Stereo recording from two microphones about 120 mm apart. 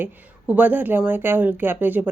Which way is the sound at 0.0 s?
15° right (ahead or behind).